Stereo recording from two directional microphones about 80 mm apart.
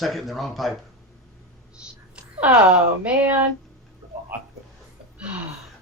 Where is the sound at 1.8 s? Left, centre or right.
Centre.